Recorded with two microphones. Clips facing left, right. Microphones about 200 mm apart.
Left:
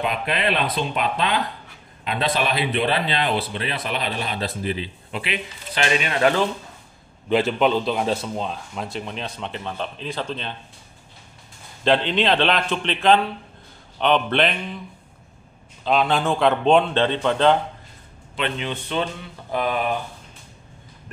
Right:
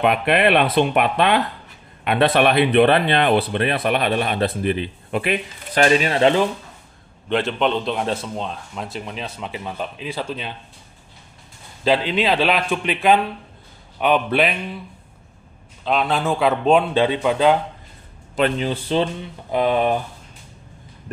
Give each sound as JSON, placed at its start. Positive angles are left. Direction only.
{"t": 0.0, "sound": "speech", "side_deg": -65}
{"t": 7.2, "sound": "a man's voice", "side_deg": 5}
{"t": 11.8, "sound": "a man's voice", "side_deg": -5}
{"t": 15.8, "sound": "a man's voice", "side_deg": 0}
{"t": 18.3, "sound": "speech", "side_deg": -40}